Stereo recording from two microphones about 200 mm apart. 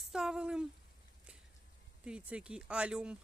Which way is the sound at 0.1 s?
5° right (ahead or behind).